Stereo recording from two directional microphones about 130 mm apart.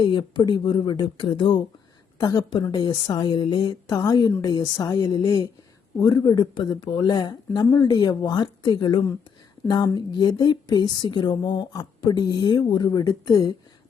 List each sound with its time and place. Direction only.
0.0 s a woman's voice: 35° left (ahead or behind)